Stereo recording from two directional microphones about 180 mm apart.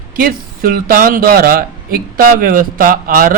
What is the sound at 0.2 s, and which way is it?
Speech, 55° right (ahead or behind).